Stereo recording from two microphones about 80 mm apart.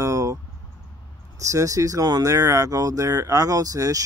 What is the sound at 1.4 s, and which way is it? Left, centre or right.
Speech, right.